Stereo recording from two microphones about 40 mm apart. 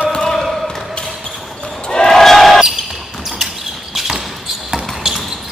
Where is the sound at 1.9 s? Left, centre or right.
Centre.